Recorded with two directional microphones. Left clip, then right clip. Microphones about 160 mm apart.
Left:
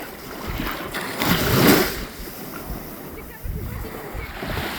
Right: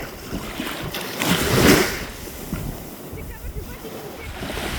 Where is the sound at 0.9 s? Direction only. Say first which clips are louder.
Left 1 dB; 40° right (ahead or behind).